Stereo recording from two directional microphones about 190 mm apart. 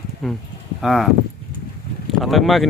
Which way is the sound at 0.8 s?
Centre (ahead or behind).